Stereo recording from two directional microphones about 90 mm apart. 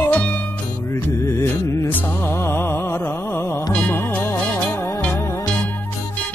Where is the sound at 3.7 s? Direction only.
15° left (ahead or behind).